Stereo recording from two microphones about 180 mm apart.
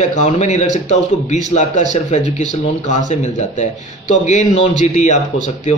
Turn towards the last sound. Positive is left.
turn(degrees=40)  # may be behind; listen again after turning